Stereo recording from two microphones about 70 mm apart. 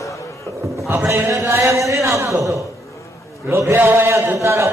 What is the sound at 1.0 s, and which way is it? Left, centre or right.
A man's voice, right.